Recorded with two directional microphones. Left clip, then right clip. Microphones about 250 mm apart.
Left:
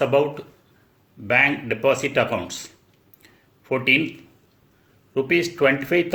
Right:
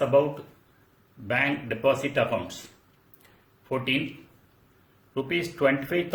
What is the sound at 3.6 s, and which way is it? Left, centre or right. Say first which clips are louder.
Speech: left 7 dB; left.